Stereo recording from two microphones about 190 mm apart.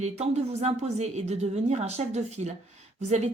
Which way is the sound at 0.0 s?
35° right (ahead or behind).